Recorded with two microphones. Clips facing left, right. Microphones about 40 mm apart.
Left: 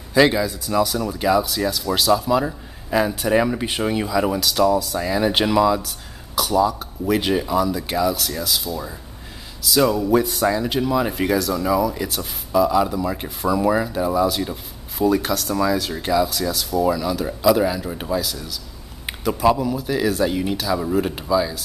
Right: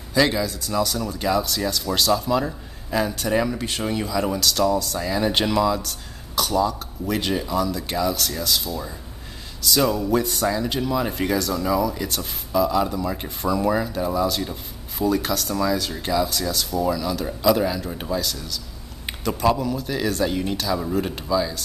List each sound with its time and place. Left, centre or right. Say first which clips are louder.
0.1 s speech: left 4 dB; centre